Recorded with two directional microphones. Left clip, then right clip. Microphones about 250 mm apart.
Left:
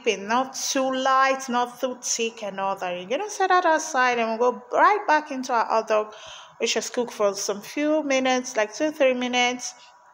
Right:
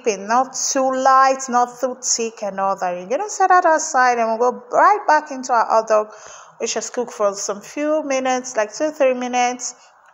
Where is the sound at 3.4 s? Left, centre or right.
Centre.